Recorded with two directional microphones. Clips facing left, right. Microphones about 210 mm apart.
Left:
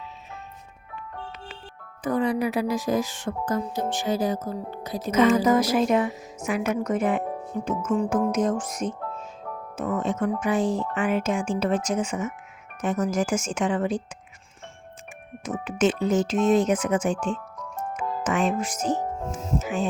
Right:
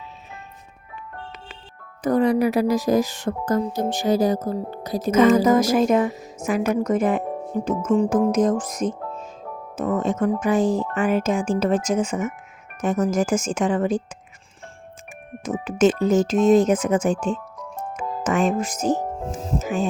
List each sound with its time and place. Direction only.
2.0 s speech: 40° right (ahead or behind)
7.8 s music: 25° right (ahead or behind)
8.1 s speech: 35° right (ahead or behind)
15.6 s speech: 40° right (ahead or behind)